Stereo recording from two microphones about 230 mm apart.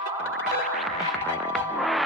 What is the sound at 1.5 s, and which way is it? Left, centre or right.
Music, centre.